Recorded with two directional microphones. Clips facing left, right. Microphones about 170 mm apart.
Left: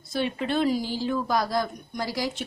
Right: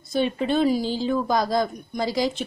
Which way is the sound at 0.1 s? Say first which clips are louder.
Right 4 dB; 20° right (ahead or behind).